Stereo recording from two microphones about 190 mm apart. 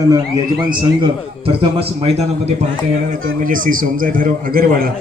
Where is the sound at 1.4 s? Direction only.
30° right (ahead or behind).